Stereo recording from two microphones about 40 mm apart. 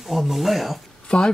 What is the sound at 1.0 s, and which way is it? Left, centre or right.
Speech, left.